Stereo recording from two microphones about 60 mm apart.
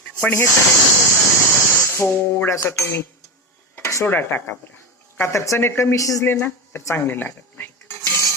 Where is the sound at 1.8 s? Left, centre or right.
Left.